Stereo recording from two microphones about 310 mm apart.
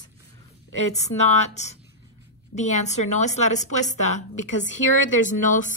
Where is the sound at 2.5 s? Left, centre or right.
Left.